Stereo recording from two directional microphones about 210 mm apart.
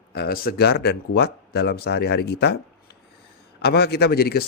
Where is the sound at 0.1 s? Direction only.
50° left (ahead or behind).